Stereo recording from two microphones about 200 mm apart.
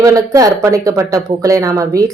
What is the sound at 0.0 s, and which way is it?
Speech, 15° right (ahead or behind).